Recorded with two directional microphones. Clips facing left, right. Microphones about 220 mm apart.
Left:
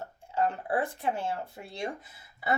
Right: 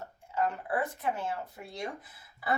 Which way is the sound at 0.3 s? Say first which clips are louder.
Left 2 dB; 30° left (ahead or behind).